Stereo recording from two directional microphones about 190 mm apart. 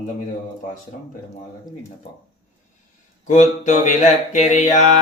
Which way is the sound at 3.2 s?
40° left (ahead or behind).